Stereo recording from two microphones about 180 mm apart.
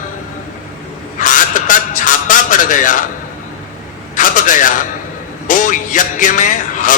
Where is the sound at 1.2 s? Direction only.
45° left (ahead or behind).